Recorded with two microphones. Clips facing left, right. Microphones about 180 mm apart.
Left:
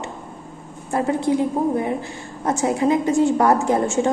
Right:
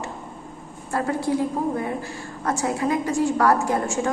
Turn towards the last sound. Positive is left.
turn(degrees=25)  # may be behind; listen again after turning